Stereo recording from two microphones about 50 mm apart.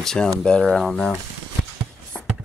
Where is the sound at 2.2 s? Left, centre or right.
Centre.